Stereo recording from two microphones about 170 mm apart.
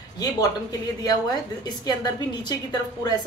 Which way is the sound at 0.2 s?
20° left (ahead or behind).